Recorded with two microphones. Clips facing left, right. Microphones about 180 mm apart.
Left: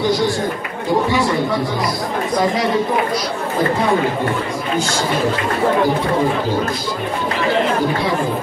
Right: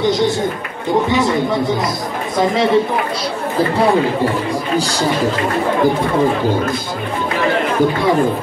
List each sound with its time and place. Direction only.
0.0 s a man's voice: 20° right (ahead or behind)
1.1 s chatter: 20° right (ahead or behind)
2.3 s speech: 25° right (ahead or behind)